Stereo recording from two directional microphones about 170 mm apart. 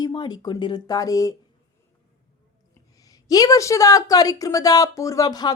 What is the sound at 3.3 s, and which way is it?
Speech, 20° left (ahead or behind).